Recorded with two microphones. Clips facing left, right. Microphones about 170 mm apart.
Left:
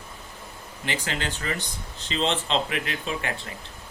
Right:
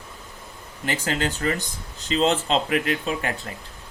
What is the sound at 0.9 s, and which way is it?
Speech, 45° right (ahead or behind).